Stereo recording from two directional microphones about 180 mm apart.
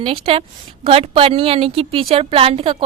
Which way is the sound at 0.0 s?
30° right (ahead or behind).